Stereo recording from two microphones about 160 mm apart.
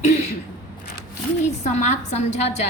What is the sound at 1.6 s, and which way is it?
A woman's voice, 45° left (ahead or behind).